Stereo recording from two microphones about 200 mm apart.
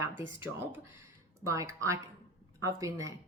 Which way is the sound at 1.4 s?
15° right (ahead or behind).